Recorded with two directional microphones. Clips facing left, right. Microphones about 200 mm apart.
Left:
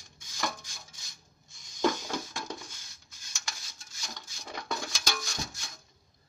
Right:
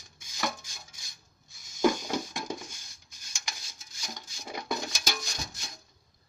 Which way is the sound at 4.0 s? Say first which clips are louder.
Right 2 dB; 10° right (ahead or behind).